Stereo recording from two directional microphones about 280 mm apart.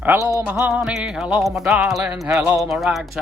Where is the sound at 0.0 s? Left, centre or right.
Centre.